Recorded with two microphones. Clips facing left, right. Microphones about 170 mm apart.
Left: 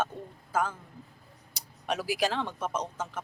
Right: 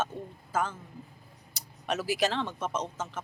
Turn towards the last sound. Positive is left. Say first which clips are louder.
# even
turn(degrees=10)  # may be behind; listen again after turning